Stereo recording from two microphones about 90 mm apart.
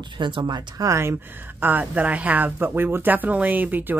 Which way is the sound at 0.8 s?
30° right (ahead or behind).